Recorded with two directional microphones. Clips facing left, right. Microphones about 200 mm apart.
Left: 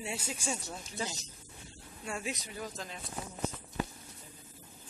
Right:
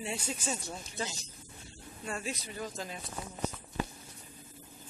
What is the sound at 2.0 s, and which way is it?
Speech, 15° left (ahead or behind).